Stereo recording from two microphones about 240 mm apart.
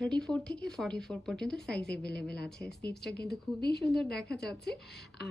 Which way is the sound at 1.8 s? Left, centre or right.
Left.